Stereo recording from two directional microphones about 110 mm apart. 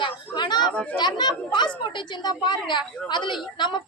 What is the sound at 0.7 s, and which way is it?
Speech, 10° left (ahead or behind).